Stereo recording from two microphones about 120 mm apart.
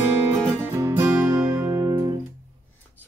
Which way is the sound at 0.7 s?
25° right (ahead or behind).